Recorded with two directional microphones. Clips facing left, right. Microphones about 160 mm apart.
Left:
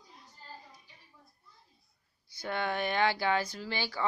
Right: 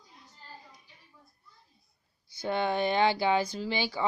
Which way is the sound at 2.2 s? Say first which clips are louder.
Right 4 dB; 25° right (ahead or behind).